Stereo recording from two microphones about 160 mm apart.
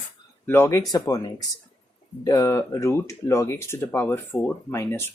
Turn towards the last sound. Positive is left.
turn(degrees=15)  # may be behind; listen again after turning